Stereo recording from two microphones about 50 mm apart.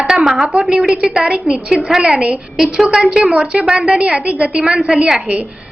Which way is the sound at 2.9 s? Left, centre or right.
Centre.